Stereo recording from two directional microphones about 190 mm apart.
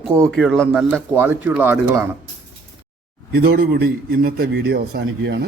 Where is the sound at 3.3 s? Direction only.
50° right (ahead or behind).